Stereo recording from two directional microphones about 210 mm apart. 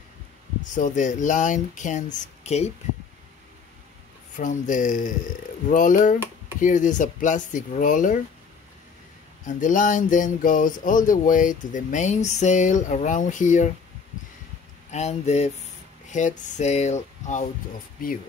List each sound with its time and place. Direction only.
0.7 s speech: 35° left (ahead or behind)
4.4 s speech: 35° left (ahead or behind)
9.5 s speech: 35° left (ahead or behind)
14.9 s speech: 35° left (ahead or behind)